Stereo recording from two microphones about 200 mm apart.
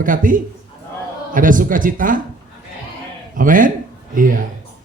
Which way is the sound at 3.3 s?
45° right (ahead or behind).